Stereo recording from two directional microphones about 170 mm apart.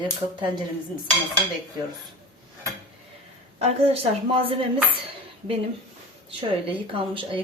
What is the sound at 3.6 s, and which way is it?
Speech, 35° right (ahead or behind).